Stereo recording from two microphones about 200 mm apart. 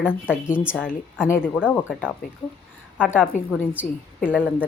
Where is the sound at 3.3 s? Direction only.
40° left (ahead or behind).